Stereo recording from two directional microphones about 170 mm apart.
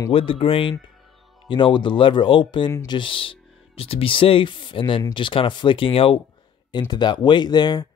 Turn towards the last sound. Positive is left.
turn(degrees=25)  # may be behind; listen again after turning